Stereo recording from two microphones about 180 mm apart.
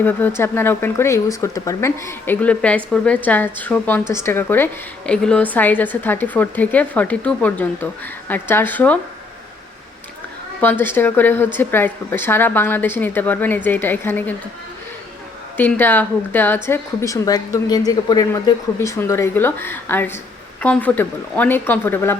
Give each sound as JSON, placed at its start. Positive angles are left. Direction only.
{"t": 0.0, "sound": "speech", "side_deg": 10}
{"t": 10.6, "sound": "speech", "side_deg": 10}
{"t": 15.5, "sound": "speech", "side_deg": 10}